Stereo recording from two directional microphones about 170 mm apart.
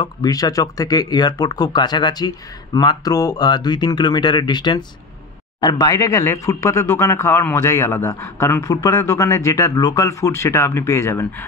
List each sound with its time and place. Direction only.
0.0 s speech: 20° left (ahead or behind)